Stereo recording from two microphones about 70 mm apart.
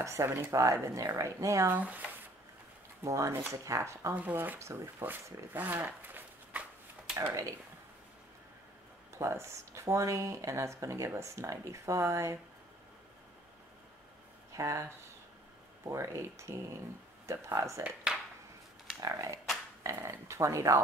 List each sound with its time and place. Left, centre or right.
0.0 s speech: right
0.5 s speech: right
1.7 s speech: right
3.0 s speech: right
4.1 s speech: right
4.6 s speech: right
5.0 s speech: right
7.2 s speech: right
9.2 s speech: right
14.6 s speech: right
15.9 s speech: right
17.8 s a sound: centre
18.9 s speech: right